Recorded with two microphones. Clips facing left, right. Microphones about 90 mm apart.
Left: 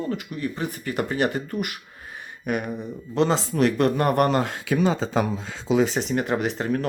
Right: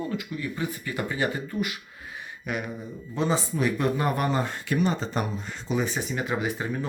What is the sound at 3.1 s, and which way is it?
Speech, 85° left.